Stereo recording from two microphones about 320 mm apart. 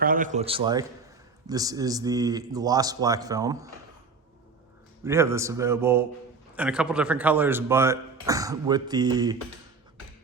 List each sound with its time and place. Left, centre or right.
0.0 s a man's voice: right
5.0 s speech: centre